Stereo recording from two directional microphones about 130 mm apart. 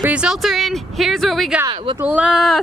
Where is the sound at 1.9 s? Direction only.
10° right (ahead or behind).